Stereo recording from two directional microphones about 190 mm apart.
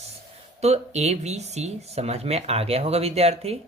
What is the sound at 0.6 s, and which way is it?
Speech, 35° right (ahead or behind).